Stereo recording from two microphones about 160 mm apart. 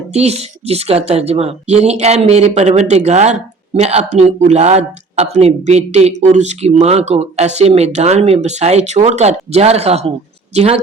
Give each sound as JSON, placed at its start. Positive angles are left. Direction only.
{"t": 0.1, "sound": "a woman's voice", "side_deg": -40}